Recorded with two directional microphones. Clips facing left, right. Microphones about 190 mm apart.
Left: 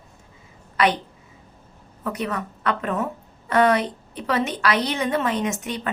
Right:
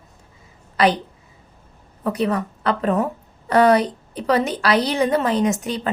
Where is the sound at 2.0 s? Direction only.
35° right (ahead or behind).